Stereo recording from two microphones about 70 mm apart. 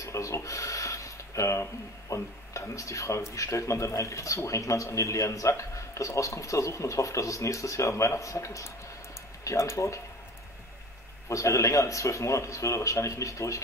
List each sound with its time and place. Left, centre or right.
0.0 s speech: left
11.2 s speech: left